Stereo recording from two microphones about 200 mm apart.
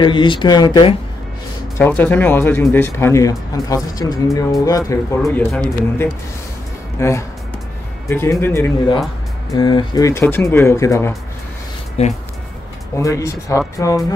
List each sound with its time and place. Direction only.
0.0 s speech: 25° left (ahead or behind)
1.8 s speech: 10° left (ahead or behind)
5.2 s speech: 5° left (ahead or behind)
7.0 s speech: 15° left (ahead or behind)
12.0 s speech: 30° left (ahead or behind)
12.9 s speech: 15° left (ahead or behind)